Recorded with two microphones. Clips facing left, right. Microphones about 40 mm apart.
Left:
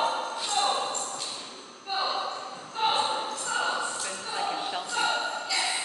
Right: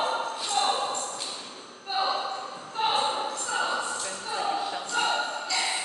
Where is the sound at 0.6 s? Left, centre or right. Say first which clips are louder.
Right 1 dB; centre.